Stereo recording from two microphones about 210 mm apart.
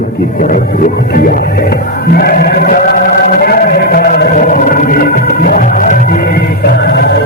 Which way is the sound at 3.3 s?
45° left (ahead or behind).